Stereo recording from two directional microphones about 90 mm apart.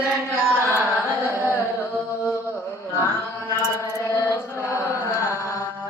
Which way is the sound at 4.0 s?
35° left (ahead or behind).